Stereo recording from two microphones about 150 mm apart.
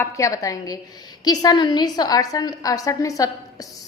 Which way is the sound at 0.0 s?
20° left (ahead or behind).